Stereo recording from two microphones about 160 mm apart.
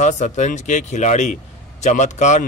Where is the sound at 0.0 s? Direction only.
50° left (ahead or behind).